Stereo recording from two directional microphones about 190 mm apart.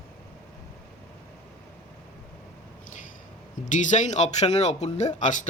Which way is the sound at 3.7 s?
40° left (ahead or behind).